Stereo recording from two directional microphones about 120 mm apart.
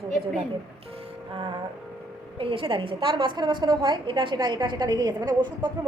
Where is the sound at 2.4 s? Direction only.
45° right (ahead or behind).